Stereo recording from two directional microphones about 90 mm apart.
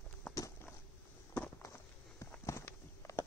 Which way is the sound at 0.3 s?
40° left (ahead or behind).